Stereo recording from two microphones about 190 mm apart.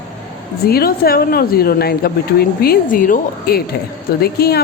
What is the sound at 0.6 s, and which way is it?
A woman's voice, 50° left (ahead or behind).